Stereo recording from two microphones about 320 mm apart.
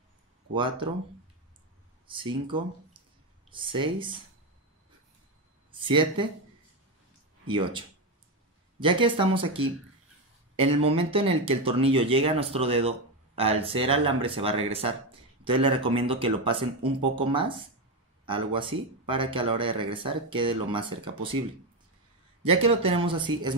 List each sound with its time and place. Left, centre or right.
0.6 s speech: centre
2.4 s speech: centre
5.7 s speech: centre
7.4 s speech: centre
22.5 s speech: centre